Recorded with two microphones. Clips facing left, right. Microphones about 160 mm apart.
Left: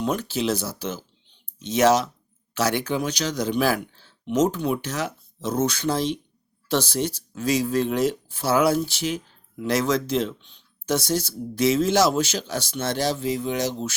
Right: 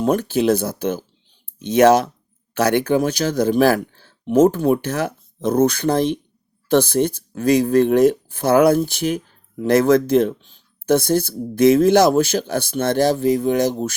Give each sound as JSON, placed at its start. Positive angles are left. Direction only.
{"t": 0.0, "sound": "speech", "side_deg": -50}